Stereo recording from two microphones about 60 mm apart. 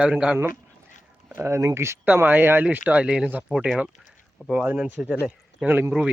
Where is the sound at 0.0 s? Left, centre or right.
Centre.